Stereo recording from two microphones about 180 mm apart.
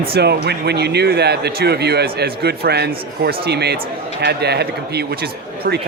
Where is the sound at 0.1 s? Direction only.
65° right (ahead or behind).